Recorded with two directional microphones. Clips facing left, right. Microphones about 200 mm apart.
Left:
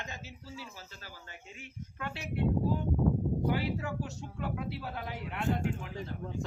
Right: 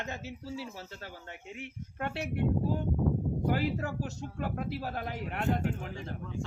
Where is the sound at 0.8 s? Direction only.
65° right (ahead or behind).